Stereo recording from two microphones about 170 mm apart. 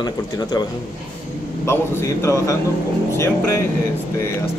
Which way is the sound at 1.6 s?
15° left (ahead or behind).